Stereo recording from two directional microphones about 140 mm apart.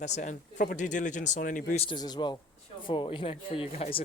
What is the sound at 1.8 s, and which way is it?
Speech, 30° left (ahead or behind).